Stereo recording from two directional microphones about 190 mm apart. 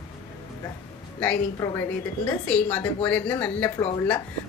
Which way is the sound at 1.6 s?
15° left (ahead or behind).